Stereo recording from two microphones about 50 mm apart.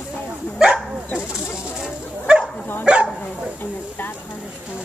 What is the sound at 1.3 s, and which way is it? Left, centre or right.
Bow-wow, centre.